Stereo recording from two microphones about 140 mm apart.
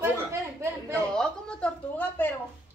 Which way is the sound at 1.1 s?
5° left (ahead or behind).